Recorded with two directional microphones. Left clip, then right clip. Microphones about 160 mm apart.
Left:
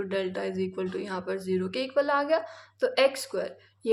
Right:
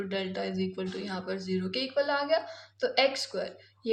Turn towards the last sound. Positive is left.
turn(degrees=50)  # may be behind; listen again after turning